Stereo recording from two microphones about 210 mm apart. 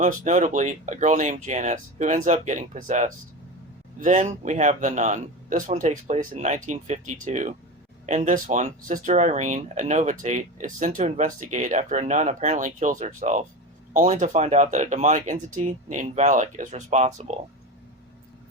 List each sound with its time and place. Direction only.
0.0 s speech: 35° right (ahead or behind)